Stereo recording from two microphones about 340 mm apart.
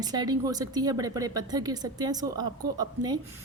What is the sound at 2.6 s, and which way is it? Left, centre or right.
Speech, right.